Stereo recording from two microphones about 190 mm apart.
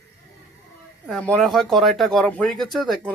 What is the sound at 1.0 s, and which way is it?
Speech, 5° left (ahead or behind).